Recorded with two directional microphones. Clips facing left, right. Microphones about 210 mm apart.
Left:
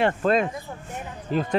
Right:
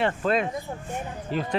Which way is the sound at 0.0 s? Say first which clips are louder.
Left 3 dB; 45° left (ahead or behind).